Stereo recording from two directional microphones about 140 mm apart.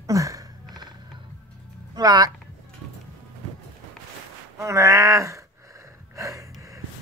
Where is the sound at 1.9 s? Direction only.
30° right (ahead or behind).